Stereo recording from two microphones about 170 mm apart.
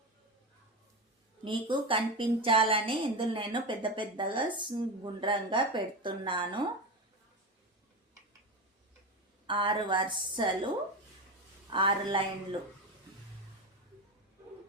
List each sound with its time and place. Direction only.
1.5 s a woman's voice: 30° right (ahead or behind)
9.5 s a woman's voice: 30° right (ahead or behind)
11.7 s a woman's voice: 30° right (ahead or behind)